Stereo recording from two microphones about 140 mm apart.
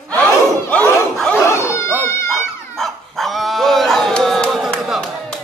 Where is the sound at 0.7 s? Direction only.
10° left (ahead or behind).